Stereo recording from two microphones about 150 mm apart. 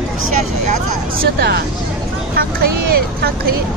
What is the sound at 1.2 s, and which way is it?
Speech, 90° right.